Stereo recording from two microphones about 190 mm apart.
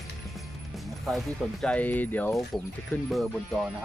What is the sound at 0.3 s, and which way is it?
Music, centre (ahead or behind).